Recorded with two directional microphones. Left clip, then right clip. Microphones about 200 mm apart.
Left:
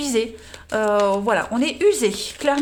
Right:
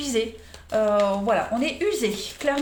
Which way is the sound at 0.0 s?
40° left (ahead or behind).